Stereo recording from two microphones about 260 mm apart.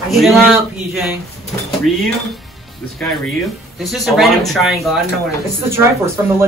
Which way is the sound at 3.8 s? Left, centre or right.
Centre.